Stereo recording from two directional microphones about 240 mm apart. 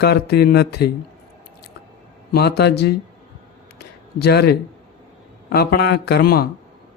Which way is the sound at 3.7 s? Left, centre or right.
Left.